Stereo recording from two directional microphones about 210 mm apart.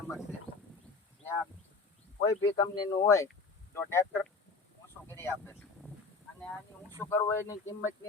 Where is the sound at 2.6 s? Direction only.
20° left (ahead or behind).